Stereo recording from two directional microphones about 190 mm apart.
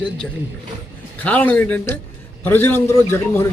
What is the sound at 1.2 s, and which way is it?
A man's voice, 10° left (ahead or behind).